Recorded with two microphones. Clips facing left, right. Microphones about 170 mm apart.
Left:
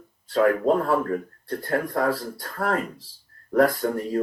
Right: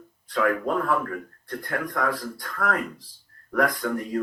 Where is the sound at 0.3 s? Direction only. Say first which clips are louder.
Left 5 dB; 30° left (ahead or behind).